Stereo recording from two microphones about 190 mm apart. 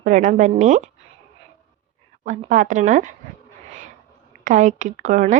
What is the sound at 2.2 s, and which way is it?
Speech, 40° right (ahead or behind).